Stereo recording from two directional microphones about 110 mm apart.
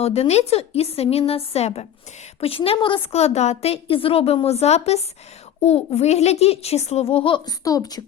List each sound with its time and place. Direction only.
0.0 s a child's voice: 70° left (ahead or behind)
2.4 s a woman's voice: 60° left (ahead or behind)
3.1 s a child's voice: 70° left (ahead or behind)
4.4 s a child's voice: 75° left (ahead or behind); by 7.5 s 50° left (ahead or behind)
7.6 s speech: 35° left (ahead or behind)